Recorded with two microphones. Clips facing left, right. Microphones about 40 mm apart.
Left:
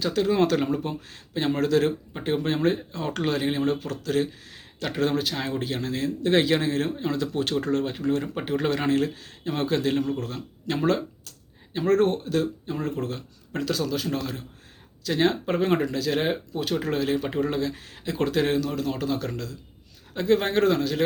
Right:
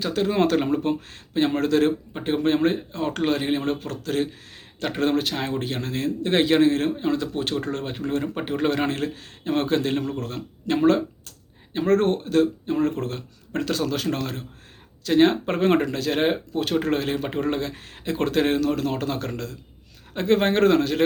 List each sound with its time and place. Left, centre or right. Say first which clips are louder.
0.0 s speech: right 1 dB; right
0.8 s speech: right 7 dB; right
7.0 s speech: right 2 dB; centre; by 9.9 s right
10.7 s speech: right 5 dB; right
11.9 s speech: right 1 dB; right
13.9 s speech: right 2 dB; right
15.0 s speech: right 5 dB; right
17.2 s speech: right 1 dB; right
17.5 s speech: even; right
18.7 s speech: right 2 dB; right